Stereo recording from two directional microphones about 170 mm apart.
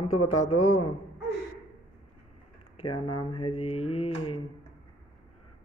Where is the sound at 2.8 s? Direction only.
30° left (ahead or behind).